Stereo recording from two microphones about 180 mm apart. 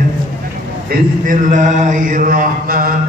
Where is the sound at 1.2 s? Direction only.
45° right (ahead or behind).